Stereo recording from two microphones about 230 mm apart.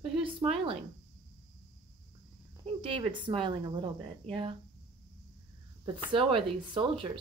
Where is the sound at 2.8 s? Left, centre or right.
Right.